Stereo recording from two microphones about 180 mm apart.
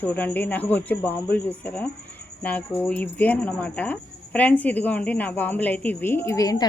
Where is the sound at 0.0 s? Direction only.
10° left (ahead or behind).